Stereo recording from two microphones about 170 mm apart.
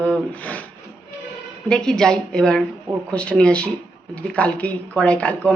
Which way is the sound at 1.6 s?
5° left (ahead or behind).